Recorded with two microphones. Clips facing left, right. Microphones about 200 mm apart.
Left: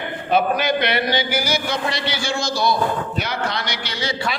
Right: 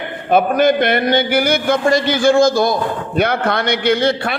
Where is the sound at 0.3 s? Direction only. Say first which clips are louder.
Right 6 dB; 50° right (ahead or behind).